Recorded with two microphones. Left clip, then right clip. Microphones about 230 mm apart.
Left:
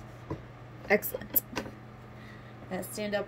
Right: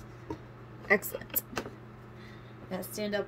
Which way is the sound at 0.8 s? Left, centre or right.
Centre.